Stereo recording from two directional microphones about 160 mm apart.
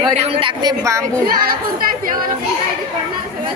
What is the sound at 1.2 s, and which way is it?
Speech, 65° right (ahead or behind).